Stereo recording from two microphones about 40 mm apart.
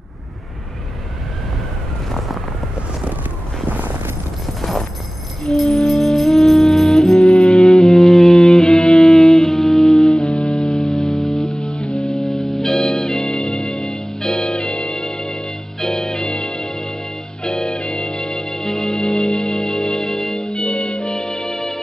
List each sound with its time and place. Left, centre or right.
4.6 s clip-clop: centre
5.5 s music: centre